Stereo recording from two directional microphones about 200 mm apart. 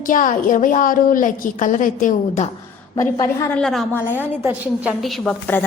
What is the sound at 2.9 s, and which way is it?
A woman's voice, 15° left (ahead or behind).